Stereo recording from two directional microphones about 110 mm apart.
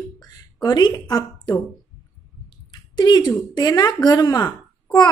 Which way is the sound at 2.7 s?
40° left (ahead or behind).